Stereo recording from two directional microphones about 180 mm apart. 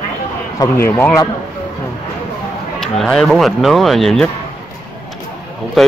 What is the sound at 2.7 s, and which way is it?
Speech, 5° left (ahead or behind).